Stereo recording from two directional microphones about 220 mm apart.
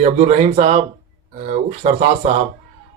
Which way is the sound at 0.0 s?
30° right (ahead or behind).